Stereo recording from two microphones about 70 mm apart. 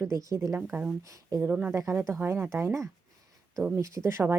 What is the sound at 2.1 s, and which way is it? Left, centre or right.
Speech, right.